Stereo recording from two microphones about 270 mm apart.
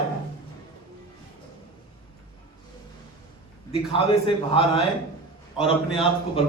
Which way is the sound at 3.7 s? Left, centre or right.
Centre.